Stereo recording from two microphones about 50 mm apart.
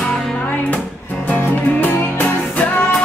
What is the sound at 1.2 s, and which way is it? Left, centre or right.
Music, left.